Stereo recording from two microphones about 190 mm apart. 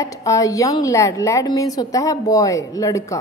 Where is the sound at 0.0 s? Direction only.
15° left (ahead or behind).